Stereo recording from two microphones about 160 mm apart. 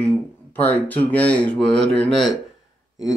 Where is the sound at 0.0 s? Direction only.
10° left (ahead or behind).